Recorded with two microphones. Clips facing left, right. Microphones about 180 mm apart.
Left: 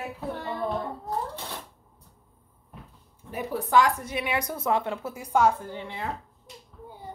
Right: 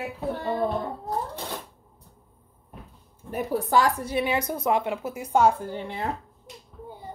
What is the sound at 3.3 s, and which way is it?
A woman's voice, 40° right (ahead or behind).